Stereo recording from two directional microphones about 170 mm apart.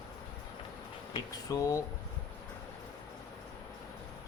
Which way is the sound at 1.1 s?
20° left (ahead or behind).